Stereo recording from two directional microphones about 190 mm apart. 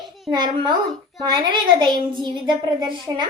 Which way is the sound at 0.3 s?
25° right (ahead or behind).